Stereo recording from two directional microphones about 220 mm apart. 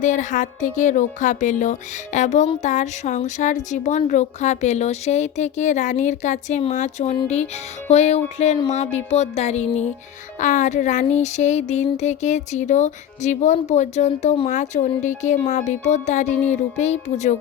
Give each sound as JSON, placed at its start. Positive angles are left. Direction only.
{"t": 0.0, "sound": "music", "side_deg": 35}